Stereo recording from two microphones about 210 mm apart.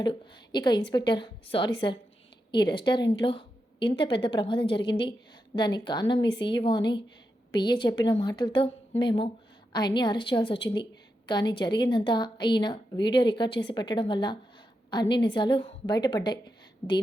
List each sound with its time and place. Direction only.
0.0 s a woman's voice: 20° left (ahead or behind)